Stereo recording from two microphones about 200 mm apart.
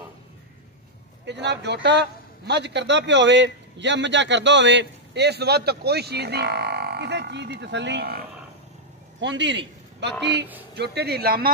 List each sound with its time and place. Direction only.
1.2 s a man's voice: 60° right (ahead or behind)
9.2 s a man's voice: 65° right (ahead or behind)
10.8 s speech: 55° right (ahead or behind)